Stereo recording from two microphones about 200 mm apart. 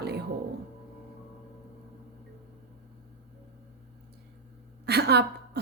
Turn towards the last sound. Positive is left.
turn(degrees=-55)  # may be behind; listen again after turning